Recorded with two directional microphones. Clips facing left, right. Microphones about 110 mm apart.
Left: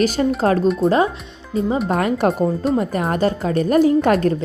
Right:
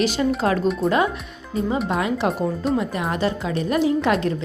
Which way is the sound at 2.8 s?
45° left (ahead or behind).